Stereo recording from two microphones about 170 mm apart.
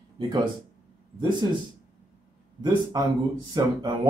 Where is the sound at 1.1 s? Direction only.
30° right (ahead or behind).